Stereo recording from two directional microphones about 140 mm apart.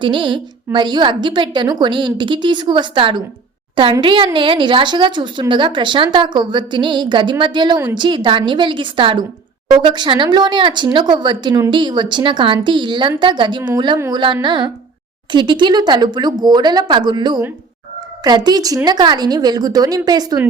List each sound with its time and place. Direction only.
0.0 s a woman's voice: 35° right (ahead or behind)